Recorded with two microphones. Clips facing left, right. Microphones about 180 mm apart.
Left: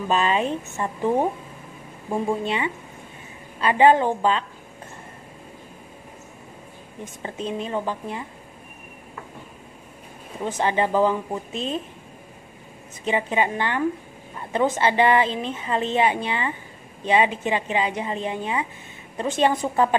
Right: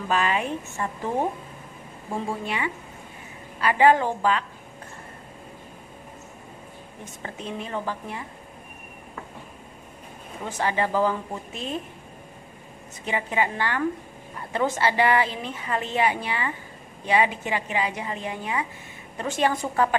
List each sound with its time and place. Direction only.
0.1 s a woman's voice: 25° left (ahead or behind)
2.4 s a woman's voice: 25° left (ahead or behind)
7.2 s a woman's voice: 20° left (ahead or behind)
10.4 s a woman's voice: 20° left (ahead or behind)
13.0 s a woman's voice: 20° left (ahead or behind)